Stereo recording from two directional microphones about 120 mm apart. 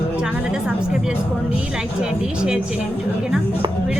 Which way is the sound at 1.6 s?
5° right (ahead or behind).